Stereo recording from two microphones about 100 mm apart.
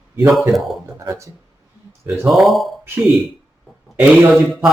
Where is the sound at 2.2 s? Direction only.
Centre (ahead or behind).